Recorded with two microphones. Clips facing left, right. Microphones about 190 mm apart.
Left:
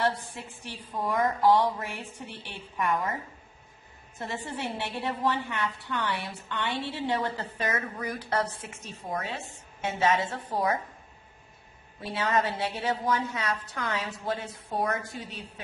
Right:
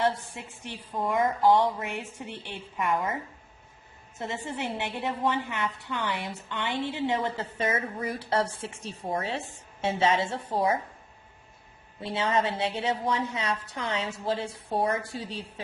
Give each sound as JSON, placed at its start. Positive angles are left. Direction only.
{"t": 0.0, "sound": "a woman's voice", "side_deg": -20}
{"t": 4.4, "sound": "a woman's voice", "side_deg": -20}
{"t": 11.9, "sound": "a woman's voice", "side_deg": -25}